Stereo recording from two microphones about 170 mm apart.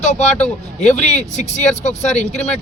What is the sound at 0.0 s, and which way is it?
A man's voice, 40° left (ahead or behind).